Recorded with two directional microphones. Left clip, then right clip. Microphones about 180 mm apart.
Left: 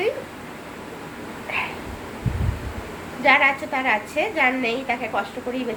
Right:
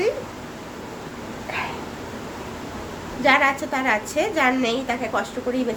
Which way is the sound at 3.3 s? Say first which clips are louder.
Left 1 dB; 10° right (ahead or behind).